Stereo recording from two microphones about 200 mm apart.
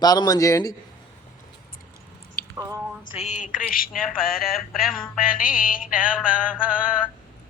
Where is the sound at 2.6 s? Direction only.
15° right (ahead or behind).